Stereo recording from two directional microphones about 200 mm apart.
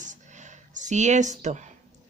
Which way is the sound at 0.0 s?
40° right (ahead or behind).